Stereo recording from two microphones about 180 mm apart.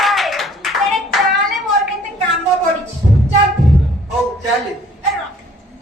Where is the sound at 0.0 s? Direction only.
Centre (ahead or behind).